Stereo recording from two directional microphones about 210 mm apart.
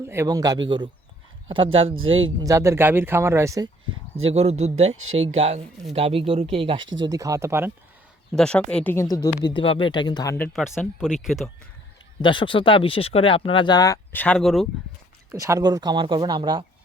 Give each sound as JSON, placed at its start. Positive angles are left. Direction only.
{"t": 0.0, "sound": "speech", "side_deg": -10}
{"t": 2.4, "sound": "speech", "side_deg": -15}
{"t": 4.2, "sound": "speech", "side_deg": -30}
{"t": 8.3, "sound": "speech", "side_deg": 5}
{"t": 10.3, "sound": "speech", "side_deg": 10}
{"t": 10.6, "sound": "speech", "side_deg": -5}
{"t": 12.2, "sound": "speech", "side_deg": 25}
{"t": 15.3, "sound": "speech", "side_deg": -15}